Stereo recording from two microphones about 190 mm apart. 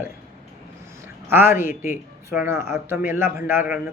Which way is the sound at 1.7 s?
45° left (ahead or behind).